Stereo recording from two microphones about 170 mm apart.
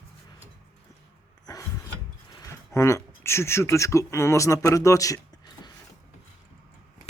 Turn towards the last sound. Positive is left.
turn(degrees=25)  # may be behind; listen again after turning